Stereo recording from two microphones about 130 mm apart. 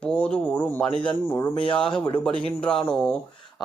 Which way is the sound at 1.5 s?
40° left (ahead or behind).